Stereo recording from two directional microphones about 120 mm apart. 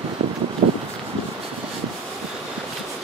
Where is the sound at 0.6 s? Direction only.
50° right (ahead or behind).